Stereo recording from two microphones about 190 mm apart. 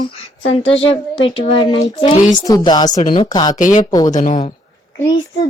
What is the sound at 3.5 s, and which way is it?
Speech, 40° left (ahead or behind).